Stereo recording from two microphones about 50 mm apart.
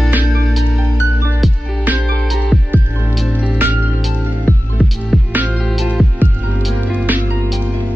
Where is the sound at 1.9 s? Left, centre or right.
Right.